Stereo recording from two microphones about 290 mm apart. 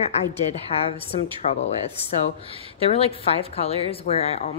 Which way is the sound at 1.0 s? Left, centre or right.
Centre.